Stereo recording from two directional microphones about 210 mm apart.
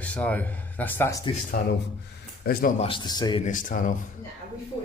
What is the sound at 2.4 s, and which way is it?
Speech, 45° left (ahead or behind).